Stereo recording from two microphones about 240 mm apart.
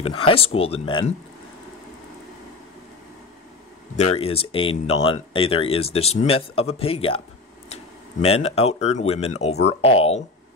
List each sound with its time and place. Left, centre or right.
0.0 s speech: left
3.9 s speech: left